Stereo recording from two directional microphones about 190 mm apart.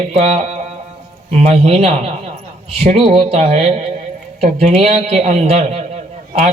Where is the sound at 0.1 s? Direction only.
35° right (ahead or behind).